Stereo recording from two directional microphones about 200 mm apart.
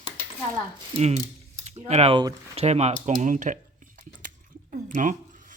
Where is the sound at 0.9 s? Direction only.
35° right (ahead or behind).